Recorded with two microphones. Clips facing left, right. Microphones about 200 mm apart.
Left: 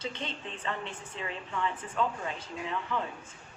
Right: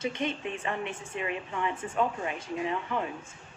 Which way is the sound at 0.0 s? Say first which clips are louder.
Right 7 dB; 10° right (ahead or behind).